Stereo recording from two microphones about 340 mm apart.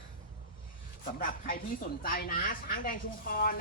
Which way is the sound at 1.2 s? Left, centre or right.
Left.